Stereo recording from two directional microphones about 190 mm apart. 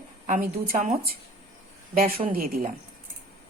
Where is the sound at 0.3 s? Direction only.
45° right (ahead or behind).